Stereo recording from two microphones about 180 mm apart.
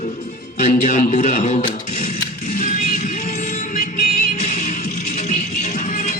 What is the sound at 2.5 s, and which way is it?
Music, 45° left (ahead or behind).